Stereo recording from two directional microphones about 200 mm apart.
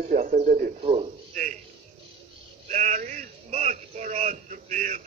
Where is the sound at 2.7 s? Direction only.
40° right (ahead or behind).